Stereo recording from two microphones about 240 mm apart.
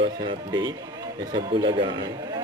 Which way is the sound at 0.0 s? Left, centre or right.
Centre.